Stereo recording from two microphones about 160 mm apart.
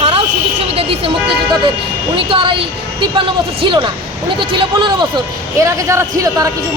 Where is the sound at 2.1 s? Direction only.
35° right (ahead or behind).